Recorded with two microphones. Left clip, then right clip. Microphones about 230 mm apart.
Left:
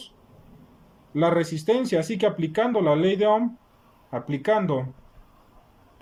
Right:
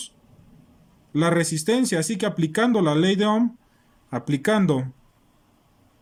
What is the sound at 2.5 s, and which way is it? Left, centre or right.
Speech, right.